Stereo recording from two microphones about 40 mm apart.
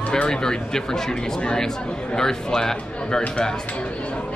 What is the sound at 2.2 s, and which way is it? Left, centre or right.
Speech, centre.